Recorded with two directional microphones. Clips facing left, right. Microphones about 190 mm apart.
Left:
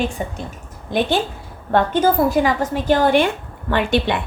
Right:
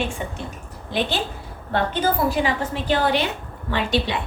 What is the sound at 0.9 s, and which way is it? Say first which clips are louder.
A woman's voice: left 5 dB; 50° left (ahead or behind).